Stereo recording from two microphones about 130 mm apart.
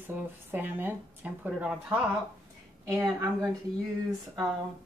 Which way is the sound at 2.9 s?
25° right (ahead or behind).